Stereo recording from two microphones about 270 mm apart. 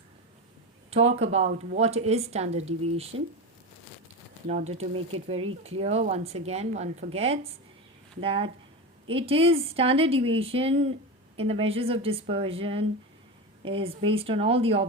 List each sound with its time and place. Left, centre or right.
0.9 s speech: right
4.4 s speech: right